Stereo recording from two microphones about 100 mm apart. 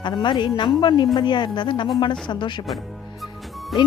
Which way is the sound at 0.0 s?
50° left (ahead or behind).